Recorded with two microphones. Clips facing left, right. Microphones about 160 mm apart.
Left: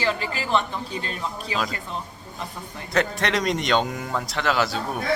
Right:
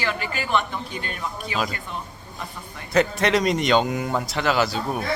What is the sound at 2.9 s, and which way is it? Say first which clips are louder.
Speech: right 4 dB; centre (ahead or behind).